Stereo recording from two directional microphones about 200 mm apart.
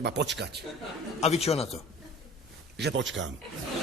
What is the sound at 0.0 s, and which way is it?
Speech, 60° right (ahead or behind).